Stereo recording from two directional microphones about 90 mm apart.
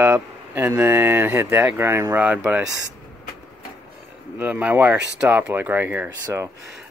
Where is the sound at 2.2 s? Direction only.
15° right (ahead or behind).